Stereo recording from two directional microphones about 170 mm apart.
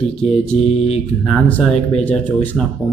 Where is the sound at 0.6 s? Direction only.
35° left (ahead or behind).